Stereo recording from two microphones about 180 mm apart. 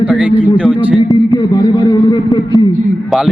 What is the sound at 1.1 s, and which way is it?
A man's voice, 20° left (ahead or behind).